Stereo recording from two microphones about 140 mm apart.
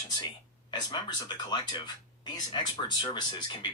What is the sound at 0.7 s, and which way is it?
Speech, 30° left (ahead or behind).